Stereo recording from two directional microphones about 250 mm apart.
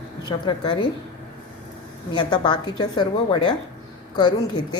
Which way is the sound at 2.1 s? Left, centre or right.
Centre.